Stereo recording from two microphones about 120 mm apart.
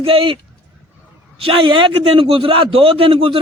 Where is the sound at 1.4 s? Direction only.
45° right (ahead or behind).